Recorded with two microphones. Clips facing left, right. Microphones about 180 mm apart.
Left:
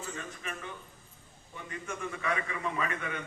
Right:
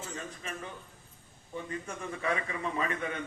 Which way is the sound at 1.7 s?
35° right (ahead or behind).